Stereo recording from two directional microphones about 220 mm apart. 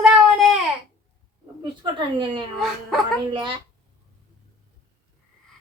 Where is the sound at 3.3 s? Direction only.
20° right (ahead or behind).